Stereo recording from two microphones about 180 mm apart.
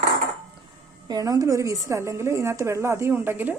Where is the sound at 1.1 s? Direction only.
20° right (ahead or behind).